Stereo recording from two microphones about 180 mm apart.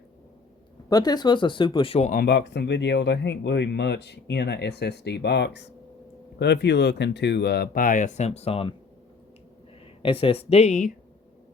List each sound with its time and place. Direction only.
0.9 s speech: 20° left (ahead or behind)
2.1 s speech: 70° left (ahead or behind); by 8.7 s 30° left (ahead or behind)
10.0 s speech: 30° left (ahead or behind)